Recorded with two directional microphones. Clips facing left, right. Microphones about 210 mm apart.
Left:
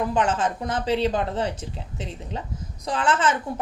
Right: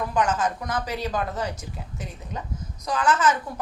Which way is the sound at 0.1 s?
30° left (ahead or behind).